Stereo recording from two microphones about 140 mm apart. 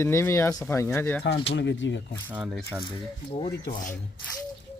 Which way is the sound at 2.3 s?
5° right (ahead or behind).